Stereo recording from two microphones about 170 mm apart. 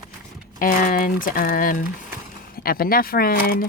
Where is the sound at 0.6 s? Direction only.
55° left (ahead or behind).